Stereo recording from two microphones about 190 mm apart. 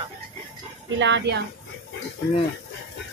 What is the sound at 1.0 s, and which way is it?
Speech, 65° right (ahead or behind).